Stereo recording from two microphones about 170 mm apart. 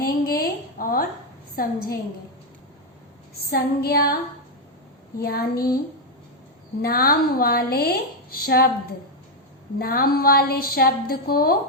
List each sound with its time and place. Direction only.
0.0 s a sound: 60° left (ahead or behind)
1.6 s a woman's voice: 60° left (ahead or behind)
3.5 s a woman's voice: 65° left (ahead or behind)
5.2 s a woman's voice: 60° left (ahead or behind)
6.8 s a woman's voice: 60° left (ahead or behind)
9.7 s a woman's voice: 60° left (ahead or behind)